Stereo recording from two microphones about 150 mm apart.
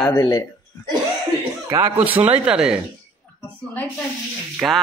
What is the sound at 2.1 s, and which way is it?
Speech, 40° right (ahead or behind).